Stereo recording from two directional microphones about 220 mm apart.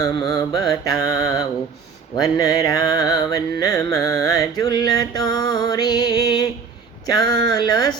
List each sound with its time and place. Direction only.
0.3 s music: 15° left (ahead or behind)